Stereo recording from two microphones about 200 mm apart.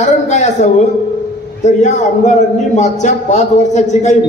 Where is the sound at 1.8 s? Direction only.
35° left (ahead or behind).